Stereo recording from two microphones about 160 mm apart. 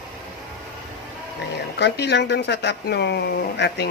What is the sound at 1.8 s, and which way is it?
Speech, 90° left.